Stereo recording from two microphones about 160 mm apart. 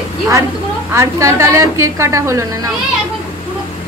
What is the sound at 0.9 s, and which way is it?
A woman's voice, 15° right (ahead or behind).